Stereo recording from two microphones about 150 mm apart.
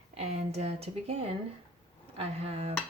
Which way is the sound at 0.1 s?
45° right (ahead or behind).